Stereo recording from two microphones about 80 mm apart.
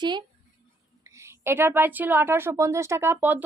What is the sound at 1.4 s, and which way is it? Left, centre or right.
Speech, right.